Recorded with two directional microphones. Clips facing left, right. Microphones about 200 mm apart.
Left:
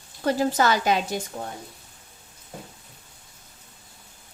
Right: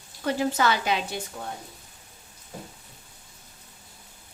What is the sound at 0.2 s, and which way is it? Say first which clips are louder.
A woman's voice: left 3 dB; 40° left (ahead or behind).